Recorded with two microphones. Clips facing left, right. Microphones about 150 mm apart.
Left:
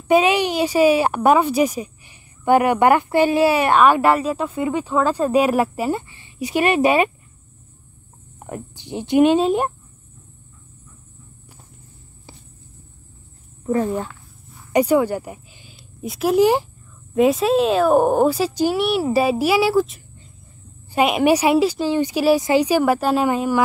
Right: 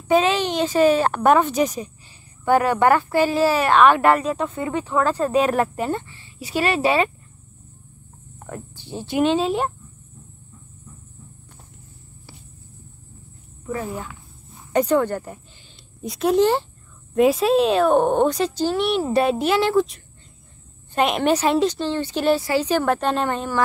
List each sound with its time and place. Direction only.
0.1 s a woman's voice: 10° left (ahead or behind)
8.4 s speech: 15° left (ahead or behind)
9.4 s speech: centre (ahead or behind)
14.7 s a woman's voice: 10° left (ahead or behind)
17.1 s a woman's voice: centre (ahead or behind)